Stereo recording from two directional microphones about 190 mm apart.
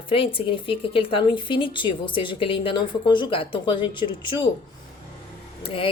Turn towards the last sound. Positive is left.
turn(degrees=30)  # may be behind; listen again after turning